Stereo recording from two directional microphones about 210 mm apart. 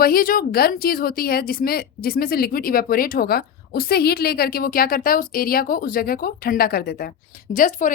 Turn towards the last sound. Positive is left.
turn(degrees=40)  # may be behind; listen again after turning